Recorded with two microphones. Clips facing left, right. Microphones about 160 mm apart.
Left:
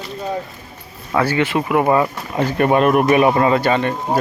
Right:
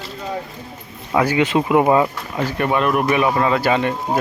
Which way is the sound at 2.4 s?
45° left (ahead or behind).